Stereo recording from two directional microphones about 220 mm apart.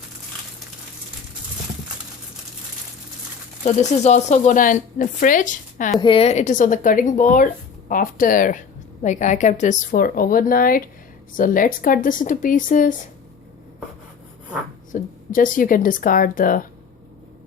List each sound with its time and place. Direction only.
3.6 s speech: 30° left (ahead or behind)
6.0 s speech: 25° left (ahead or behind)
14.9 s speech: 40° left (ahead or behind)